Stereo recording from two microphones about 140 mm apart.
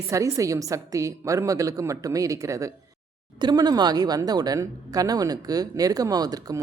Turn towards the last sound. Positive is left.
turn(degrees=-25)  # may be behind; listen again after turning